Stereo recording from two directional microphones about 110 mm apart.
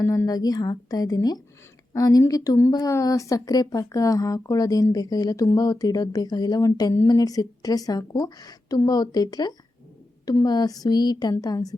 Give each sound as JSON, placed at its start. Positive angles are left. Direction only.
{"t": 0.0, "sound": "speech", "side_deg": 30}